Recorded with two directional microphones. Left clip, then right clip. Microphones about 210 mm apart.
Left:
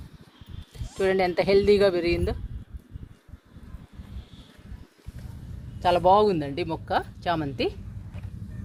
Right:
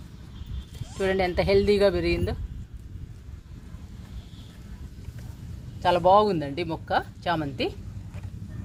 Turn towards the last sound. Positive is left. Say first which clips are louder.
# left 1 dB
turn(degrees=40)  # may be behind; listen again after turning